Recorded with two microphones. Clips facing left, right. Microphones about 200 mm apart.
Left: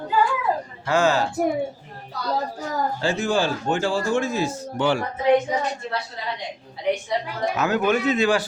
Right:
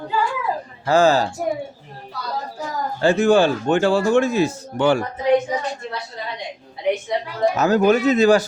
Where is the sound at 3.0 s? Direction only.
60° right (ahead or behind).